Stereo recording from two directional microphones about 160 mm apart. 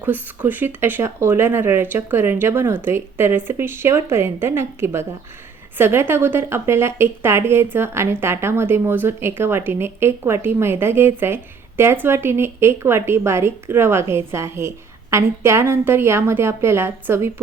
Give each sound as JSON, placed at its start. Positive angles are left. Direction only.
{"t": 0.0, "sound": "speech", "side_deg": -10}